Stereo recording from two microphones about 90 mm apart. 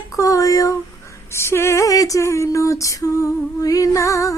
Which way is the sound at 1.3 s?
30° left (ahead or behind).